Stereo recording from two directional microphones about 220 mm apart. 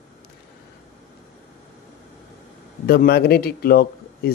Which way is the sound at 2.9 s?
45° left (ahead or behind).